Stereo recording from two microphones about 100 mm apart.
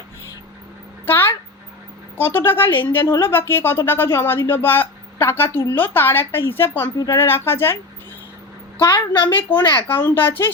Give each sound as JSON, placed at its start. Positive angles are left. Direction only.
{"t": 1.0, "sound": "a sound", "side_deg": 20}
{"t": 2.1, "sound": "a woman's voice", "side_deg": 20}
{"t": 8.8, "sound": "a woman's voice", "side_deg": 25}